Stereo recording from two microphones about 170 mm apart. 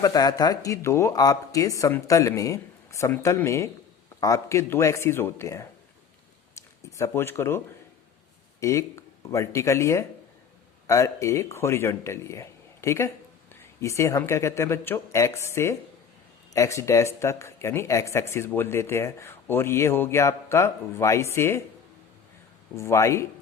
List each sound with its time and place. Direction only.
0.0 s speech: 20° left (ahead or behind)
8.6 s speech: 15° left (ahead or behind)
22.7 s speech: 15° left (ahead or behind)